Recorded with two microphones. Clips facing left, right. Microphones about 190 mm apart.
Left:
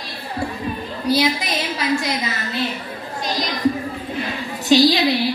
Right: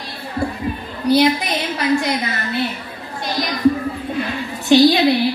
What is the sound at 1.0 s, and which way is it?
A woman's voice, 60° right (ahead or behind).